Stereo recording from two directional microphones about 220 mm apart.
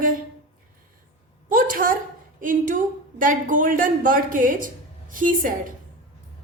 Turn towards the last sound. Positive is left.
turn(degrees=-35)  # may be behind; listen again after turning